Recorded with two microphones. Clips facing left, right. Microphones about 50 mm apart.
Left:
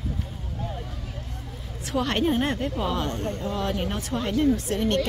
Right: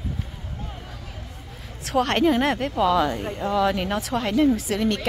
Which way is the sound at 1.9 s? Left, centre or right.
Right.